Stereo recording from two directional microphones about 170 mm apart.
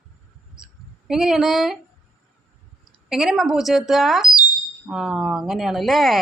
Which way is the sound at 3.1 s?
Centre (ahead or behind).